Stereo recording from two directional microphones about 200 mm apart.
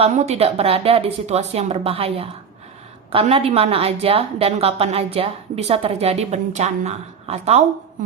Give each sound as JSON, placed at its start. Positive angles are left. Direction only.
{"t": 0.0, "sound": "a woman's voice", "side_deg": -30}